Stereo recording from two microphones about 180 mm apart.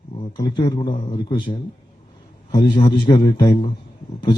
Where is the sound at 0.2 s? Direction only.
25° left (ahead or behind).